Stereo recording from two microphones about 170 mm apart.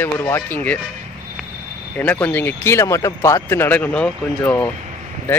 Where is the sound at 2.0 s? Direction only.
10° left (ahead or behind).